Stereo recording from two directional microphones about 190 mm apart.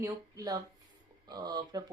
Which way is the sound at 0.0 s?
20° right (ahead or behind).